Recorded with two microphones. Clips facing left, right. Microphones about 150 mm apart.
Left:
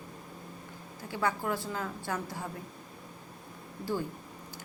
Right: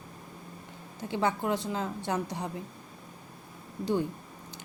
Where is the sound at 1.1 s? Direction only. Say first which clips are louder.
Right 3 dB; 20° right (ahead or behind).